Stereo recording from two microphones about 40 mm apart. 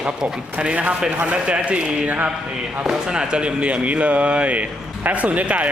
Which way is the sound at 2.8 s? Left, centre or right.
Centre.